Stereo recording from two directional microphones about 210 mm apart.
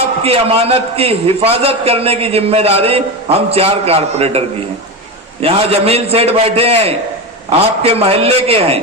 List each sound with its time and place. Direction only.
0.2 s a man's voice: 30° right (ahead or behind)